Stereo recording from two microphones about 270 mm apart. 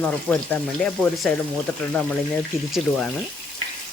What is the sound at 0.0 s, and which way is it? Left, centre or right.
Speech, centre.